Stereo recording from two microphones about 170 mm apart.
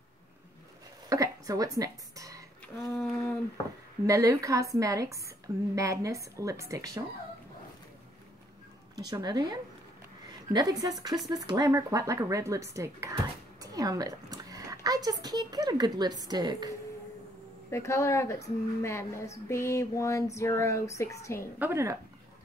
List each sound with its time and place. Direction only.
1.0 s a sound: 20° right (ahead or behind)
2.9 s a woman's voice: 5° left (ahead or behind)
4.0 s a woman's voice: 20° right (ahead or behind)
8.9 s a woman's voice: 25° right (ahead or behind)
11.1 s speech: centre (ahead or behind)
11.4 s a woman's voice: 20° right (ahead or behind)
17.6 s a woman's voice: 15° left (ahead or behind)
21.5 s speech: 15° right (ahead or behind)